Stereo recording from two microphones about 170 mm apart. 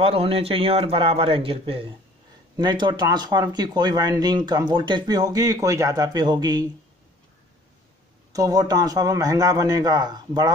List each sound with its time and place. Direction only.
0.0 s a man's voice: 35° right (ahead or behind)
8.3 s speech: 20° right (ahead or behind)